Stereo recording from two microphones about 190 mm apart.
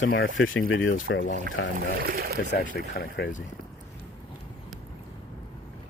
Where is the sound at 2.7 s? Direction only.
55° left (ahead or behind).